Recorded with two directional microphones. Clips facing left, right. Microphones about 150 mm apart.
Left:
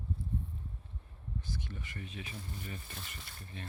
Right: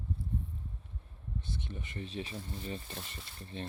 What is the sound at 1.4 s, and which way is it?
Speech, 25° right (ahead or behind).